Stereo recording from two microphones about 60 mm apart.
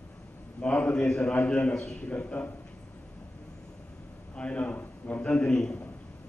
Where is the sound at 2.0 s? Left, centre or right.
Left.